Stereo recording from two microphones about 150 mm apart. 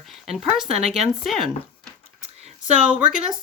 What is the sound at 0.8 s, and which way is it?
Speech, centre (ahead or behind).